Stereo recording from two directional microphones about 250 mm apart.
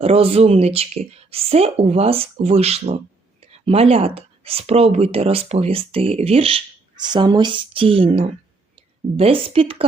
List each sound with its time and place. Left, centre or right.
0.0 s speech: right